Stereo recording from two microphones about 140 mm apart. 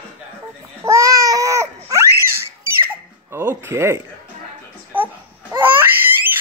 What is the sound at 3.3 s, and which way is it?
Music, 20° right (ahead or behind).